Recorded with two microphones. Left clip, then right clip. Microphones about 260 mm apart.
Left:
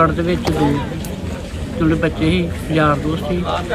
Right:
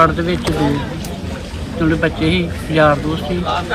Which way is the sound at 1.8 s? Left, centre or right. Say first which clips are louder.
Right 1 dB; centre.